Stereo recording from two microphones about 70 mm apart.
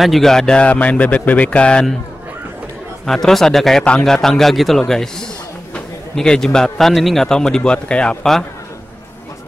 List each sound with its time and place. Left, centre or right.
0.0 s a man's voice: centre
3.1 s a man's voice: centre
6.1 s a man's voice: centre